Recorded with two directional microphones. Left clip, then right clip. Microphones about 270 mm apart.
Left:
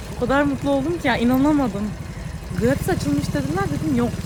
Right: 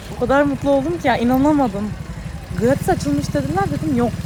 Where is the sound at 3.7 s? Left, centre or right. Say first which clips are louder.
Right 2 dB; left.